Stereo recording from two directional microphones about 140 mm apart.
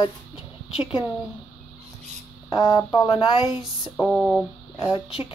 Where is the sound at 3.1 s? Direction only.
35° left (ahead or behind).